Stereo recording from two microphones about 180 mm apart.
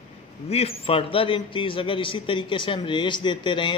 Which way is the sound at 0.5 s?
35° left (ahead or behind).